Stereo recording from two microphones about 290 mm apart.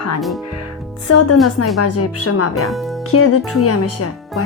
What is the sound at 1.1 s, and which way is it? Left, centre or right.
Speech, left.